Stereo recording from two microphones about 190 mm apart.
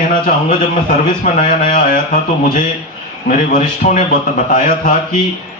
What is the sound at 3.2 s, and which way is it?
A man's voice, 40° left (ahead or behind).